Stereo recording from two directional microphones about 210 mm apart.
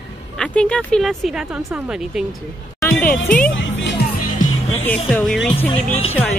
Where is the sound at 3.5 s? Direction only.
60° left (ahead or behind).